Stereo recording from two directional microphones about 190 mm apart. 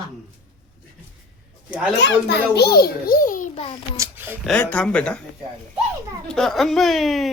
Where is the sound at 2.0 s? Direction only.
65° left (ahead or behind); by 3.5 s 45° left (ahead or behind).